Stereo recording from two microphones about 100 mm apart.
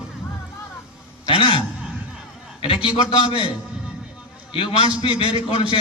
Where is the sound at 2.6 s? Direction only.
60° left (ahead or behind).